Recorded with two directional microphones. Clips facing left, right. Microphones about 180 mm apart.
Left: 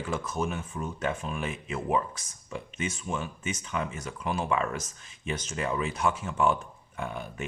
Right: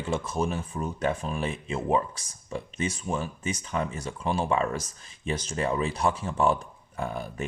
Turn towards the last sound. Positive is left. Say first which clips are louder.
# right 3 dB
turn(degrees=-35)  # may be behind; listen again after turning